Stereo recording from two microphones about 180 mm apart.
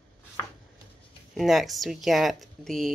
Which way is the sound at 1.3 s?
Centre (ahead or behind).